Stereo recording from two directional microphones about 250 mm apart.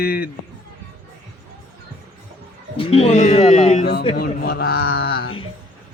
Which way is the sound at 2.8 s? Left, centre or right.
Left.